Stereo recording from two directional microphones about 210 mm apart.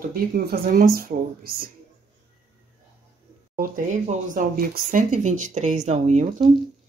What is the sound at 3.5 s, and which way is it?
Speech, 40° right (ahead or behind).